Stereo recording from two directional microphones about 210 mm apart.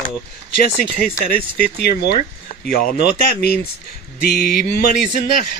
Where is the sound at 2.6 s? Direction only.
45° left (ahead or behind).